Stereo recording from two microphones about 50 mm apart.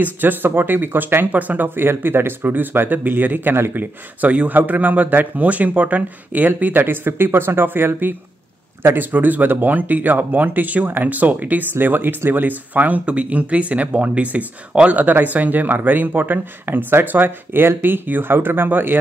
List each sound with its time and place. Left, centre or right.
0.0 s speech: right
1.9 s speech: right
3.7 s speech: right
6.9 s speech: right
15.0 s speech: right